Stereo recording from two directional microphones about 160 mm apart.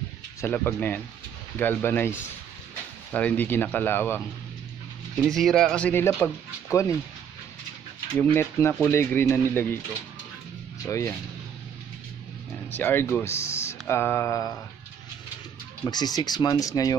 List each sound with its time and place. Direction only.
0.4 s speech: 15° left (ahead or behind)
5.2 s speech: centre (ahead or behind)
8.2 s speech: 10° left (ahead or behind)
10.9 s speech: 15° left (ahead or behind)
12.7 s speech: 15° left (ahead or behind)
15.8 s speech: 25° left (ahead or behind)